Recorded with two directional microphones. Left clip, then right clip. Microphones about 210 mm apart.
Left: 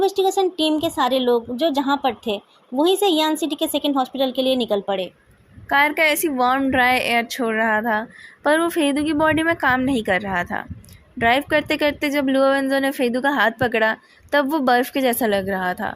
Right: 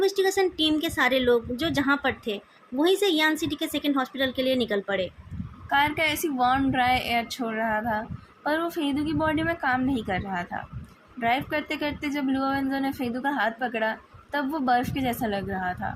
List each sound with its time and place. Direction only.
0.0 s a woman's voice: 20° left (ahead or behind)
5.6 s a woman's voice: 40° left (ahead or behind)